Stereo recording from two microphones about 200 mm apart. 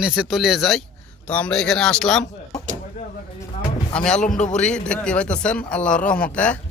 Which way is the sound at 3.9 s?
5° left (ahead or behind).